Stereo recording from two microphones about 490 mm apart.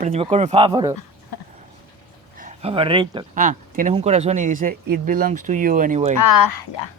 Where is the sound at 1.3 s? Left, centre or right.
Left.